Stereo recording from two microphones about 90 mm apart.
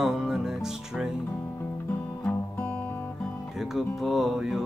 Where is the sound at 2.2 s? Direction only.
20° left (ahead or behind).